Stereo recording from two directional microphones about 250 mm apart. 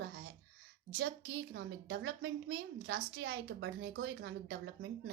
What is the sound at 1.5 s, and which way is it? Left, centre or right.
A woman's voice, right.